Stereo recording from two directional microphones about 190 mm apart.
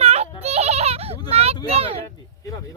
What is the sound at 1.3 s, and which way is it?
Speech, 30° right (ahead or behind).